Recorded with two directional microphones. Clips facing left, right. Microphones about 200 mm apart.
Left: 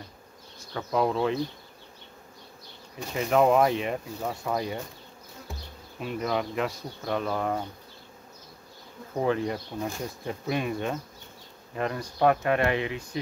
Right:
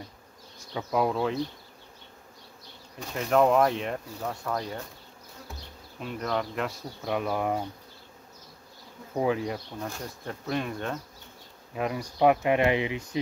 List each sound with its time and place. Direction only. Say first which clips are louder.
0.7 s speech: left 1 dB; 5° right (ahead or behind)
3.1 s speech: left 1 dB; 5° left (ahead or behind)
5.9 s speech: left 2 dB; 5° left (ahead or behind); by 7.6 s 10° right (ahead or behind)
9.2 s speech: left 1 dB; 5° right (ahead or behind)
9.8 s speech: left 4 dB; 5° left (ahead or behind)
11.7 s speech: even; 10° right (ahead or behind)